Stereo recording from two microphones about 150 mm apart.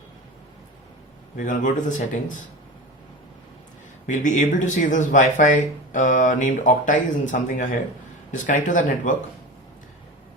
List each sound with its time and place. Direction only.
1.4 s speech: 60° left (ahead or behind)
4.0 s speech: 55° left (ahead or behind)